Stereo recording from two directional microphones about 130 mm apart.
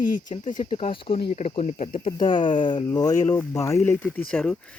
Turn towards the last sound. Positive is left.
turn(degrees=10)  # may be behind; listen again after turning